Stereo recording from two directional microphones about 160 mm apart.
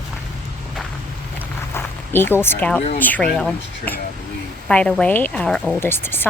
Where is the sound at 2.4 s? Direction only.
10° left (ahead or behind).